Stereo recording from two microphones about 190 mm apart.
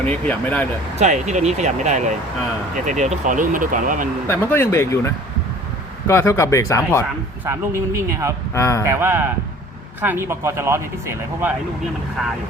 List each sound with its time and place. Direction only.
0.0 s speech: 5° left (ahead or behind)
0.9 s speech: 40° right (ahead or behind)
4.3 s speech: 10° left (ahead or behind)
7.4 s speech: 15° right (ahead or behind)
8.5 s speech: 15° left (ahead or behind)
8.9 s speech: 10° right (ahead or behind)